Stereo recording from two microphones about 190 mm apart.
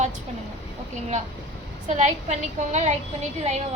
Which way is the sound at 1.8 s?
40° right (ahead or behind).